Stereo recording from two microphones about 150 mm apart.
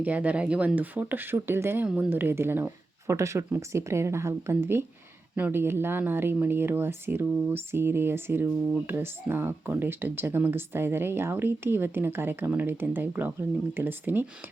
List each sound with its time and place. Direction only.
0.0 s speech: 10° right (ahead or behind)